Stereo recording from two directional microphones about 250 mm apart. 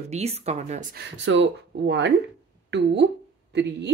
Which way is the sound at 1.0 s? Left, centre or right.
Right.